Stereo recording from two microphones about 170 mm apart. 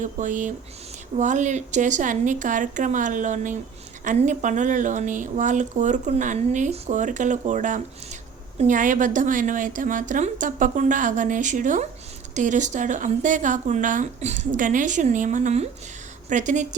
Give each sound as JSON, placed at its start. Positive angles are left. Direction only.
{"t": 0.0, "sound": "speech", "side_deg": -50}